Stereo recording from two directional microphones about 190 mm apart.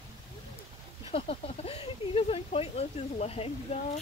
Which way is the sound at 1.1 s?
30° left (ahead or behind).